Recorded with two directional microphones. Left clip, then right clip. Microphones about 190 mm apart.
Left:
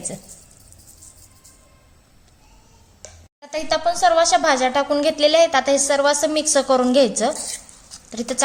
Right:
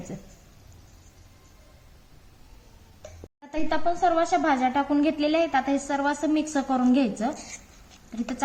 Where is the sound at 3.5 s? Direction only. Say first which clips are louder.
Left 6 dB; 50° left (ahead or behind).